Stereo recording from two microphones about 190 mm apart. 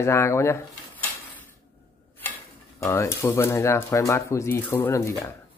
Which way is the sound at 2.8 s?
15° left (ahead or behind).